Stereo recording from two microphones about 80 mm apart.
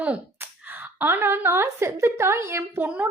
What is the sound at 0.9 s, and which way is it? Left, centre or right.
A woman's voice, right.